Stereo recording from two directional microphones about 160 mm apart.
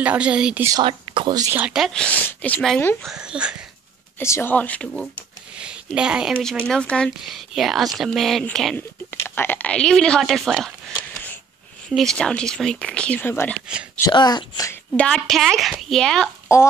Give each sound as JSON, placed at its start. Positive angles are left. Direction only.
{"t": 0.0, "sound": "a woman's voice", "side_deg": -10}
{"t": 0.7, "sound": "speech", "side_deg": -30}
{"t": 1.5, "sound": "speech", "side_deg": -5}
{"t": 3.1, "sound": "speech", "side_deg": -5}
{"t": 4.2, "sound": "speech", "side_deg": 15}
{"t": 5.6, "sound": "speech", "side_deg": -5}
{"t": 6.6, "sound": "speech", "side_deg": 5}
{"t": 14.1, "sound": "speech", "side_deg": 25}
{"t": 15.0, "sound": "speech", "side_deg": 5}
{"t": 16.5, "sound": "speech", "side_deg": 15}